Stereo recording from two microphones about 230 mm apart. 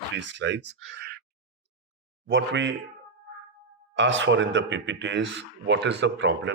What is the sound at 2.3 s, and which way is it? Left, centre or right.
Speech, right.